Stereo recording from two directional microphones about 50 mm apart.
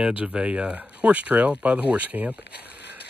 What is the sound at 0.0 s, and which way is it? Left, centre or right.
Speech, right.